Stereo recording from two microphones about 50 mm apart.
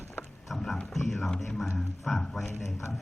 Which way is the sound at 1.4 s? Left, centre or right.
Centre.